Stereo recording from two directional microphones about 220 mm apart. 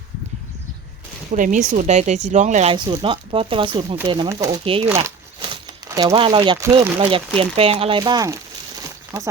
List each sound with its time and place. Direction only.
1.3 s speech: 35° right (ahead or behind)
5.9 s speech: 15° right (ahead or behind)